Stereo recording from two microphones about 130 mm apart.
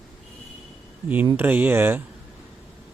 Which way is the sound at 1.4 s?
15° right (ahead or behind).